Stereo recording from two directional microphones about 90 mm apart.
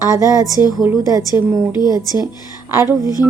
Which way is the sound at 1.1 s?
40° right (ahead or behind).